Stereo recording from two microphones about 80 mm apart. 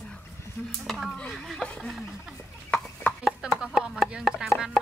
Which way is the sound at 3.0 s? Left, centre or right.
Centre.